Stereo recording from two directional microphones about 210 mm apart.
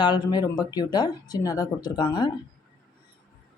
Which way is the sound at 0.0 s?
20° left (ahead or behind).